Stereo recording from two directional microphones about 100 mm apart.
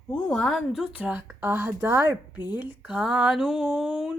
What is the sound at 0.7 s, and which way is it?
A woman's voice, 10° right (ahead or behind).